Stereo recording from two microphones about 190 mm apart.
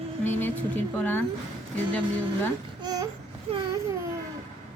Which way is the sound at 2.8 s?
20° right (ahead or behind).